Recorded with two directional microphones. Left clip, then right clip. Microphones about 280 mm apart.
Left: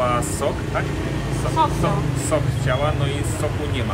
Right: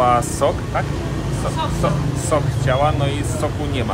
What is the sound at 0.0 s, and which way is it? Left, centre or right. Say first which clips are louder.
Speech: right 5 dB; centre.